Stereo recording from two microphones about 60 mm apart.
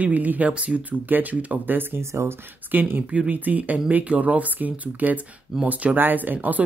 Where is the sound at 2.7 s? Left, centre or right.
Right.